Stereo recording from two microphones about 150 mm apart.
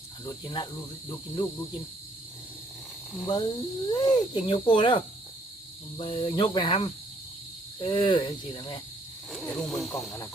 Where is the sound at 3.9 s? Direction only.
25° left (ahead or behind).